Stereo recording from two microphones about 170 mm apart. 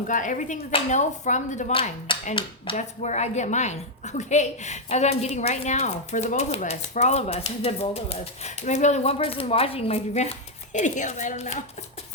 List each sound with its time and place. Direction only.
0.1 s speech: 50° left (ahead or behind)
1.7 s speech: 30° left (ahead or behind)